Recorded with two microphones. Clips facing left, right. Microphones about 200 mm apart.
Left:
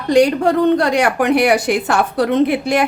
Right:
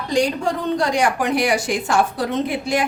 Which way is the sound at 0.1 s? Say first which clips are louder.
Left 8 dB; 60° left (ahead or behind).